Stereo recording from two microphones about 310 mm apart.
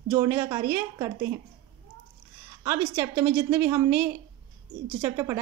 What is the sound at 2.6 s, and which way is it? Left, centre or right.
Speech, centre.